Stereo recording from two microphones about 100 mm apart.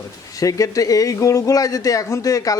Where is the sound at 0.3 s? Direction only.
35° left (ahead or behind).